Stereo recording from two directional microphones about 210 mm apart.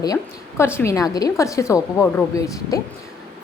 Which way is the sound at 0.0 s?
15° left (ahead or behind).